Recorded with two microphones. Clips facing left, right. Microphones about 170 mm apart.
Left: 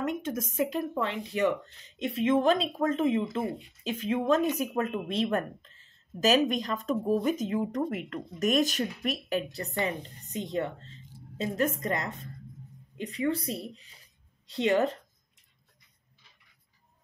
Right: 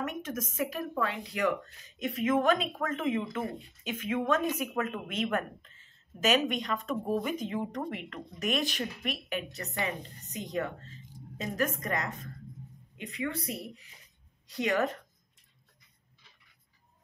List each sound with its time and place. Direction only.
0.2 s a woman's voice: 30° left (ahead or behind)